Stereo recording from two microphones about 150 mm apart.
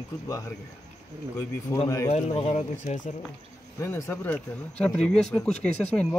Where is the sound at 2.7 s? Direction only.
55° left (ahead or behind).